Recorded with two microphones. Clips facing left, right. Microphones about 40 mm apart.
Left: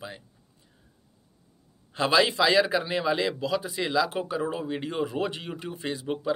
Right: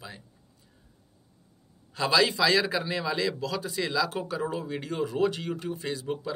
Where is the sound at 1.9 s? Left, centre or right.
Left.